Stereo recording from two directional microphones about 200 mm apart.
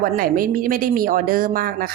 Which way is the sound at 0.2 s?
45° right (ahead or behind).